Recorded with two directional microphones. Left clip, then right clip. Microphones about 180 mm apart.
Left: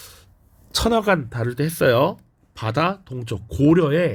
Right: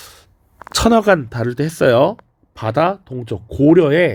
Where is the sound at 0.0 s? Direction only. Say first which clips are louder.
Right 5 dB; 30° right (ahead or behind).